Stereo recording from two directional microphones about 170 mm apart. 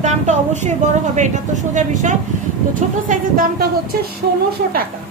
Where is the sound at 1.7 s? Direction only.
45° right (ahead or behind).